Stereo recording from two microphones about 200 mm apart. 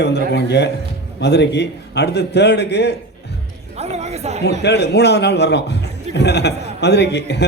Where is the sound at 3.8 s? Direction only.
35° right (ahead or behind).